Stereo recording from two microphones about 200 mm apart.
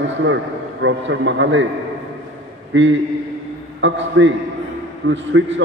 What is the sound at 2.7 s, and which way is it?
A man's voice, 70° right (ahead or behind).